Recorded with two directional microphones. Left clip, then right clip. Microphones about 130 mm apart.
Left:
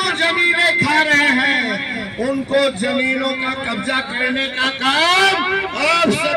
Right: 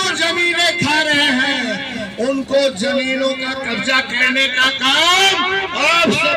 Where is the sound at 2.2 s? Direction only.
40° right (ahead or behind).